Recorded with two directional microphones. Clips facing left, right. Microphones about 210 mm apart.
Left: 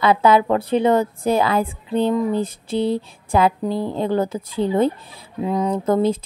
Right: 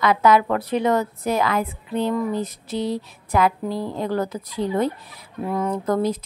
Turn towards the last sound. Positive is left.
turn(degrees=25)  # may be behind; listen again after turning